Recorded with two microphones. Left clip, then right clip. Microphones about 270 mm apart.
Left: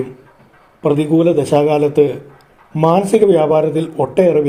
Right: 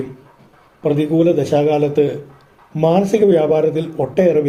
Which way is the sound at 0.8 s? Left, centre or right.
Left.